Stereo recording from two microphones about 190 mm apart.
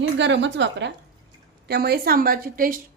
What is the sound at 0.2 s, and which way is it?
Speech, 70° right (ahead or behind).